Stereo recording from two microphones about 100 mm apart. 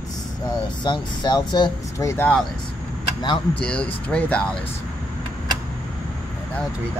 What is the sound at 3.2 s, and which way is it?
Speech, 50° left (ahead or behind).